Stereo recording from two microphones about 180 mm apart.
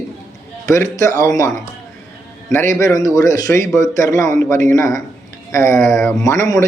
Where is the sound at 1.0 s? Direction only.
15° left (ahead or behind).